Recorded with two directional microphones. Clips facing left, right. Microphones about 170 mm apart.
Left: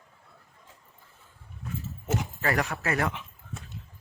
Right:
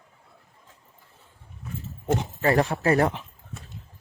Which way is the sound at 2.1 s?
30° right (ahead or behind).